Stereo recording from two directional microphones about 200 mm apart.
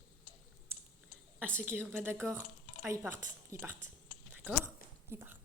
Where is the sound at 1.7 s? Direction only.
10° right (ahead or behind).